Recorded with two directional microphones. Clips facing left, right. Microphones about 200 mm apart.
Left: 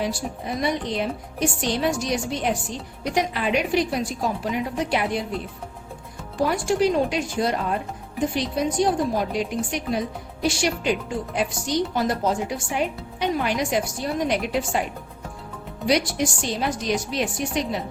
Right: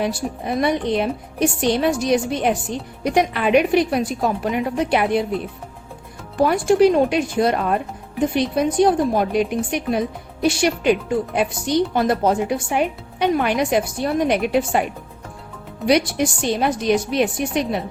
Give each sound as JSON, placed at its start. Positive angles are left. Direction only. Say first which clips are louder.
{"t": 0.0, "sound": "a woman's voice", "louder": "right 4 dB", "side_deg": -60}
{"t": 6.3, "sound": "a woman's voice", "louder": "right 6 dB", "side_deg": -60}
{"t": 15.9, "sound": "a woman's voice", "louder": "right 4 dB", "side_deg": -60}